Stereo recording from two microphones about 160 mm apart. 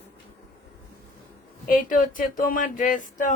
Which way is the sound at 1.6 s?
60° left (ahead or behind).